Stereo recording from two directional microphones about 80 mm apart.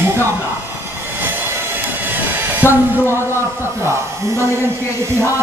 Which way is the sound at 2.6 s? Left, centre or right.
Left.